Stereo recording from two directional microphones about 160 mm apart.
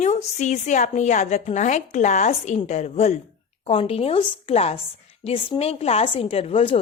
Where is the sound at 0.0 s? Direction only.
45° left (ahead or behind).